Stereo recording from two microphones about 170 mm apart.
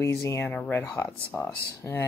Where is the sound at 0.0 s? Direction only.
15° left (ahead or behind).